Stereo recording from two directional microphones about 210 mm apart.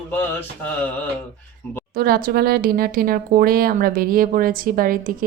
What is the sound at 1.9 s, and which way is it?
Speech, 45° right (ahead or behind).